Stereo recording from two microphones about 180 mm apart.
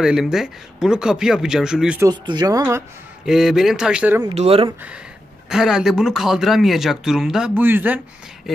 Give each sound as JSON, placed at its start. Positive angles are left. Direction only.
{"t": 0.0, "sound": "speech", "side_deg": -5}
{"t": 2.0, "sound": "speech", "side_deg": -20}
{"t": 3.3, "sound": "speech", "side_deg": 0}
{"t": 4.2, "sound": "speech", "side_deg": -30}
{"t": 5.5, "sound": "speech", "side_deg": -5}